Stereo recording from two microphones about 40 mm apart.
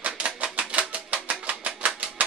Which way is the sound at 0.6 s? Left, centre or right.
Right.